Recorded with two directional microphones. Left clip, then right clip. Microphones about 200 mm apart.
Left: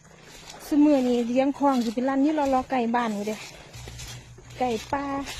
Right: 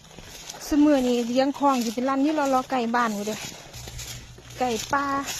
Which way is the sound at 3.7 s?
55° right (ahead or behind).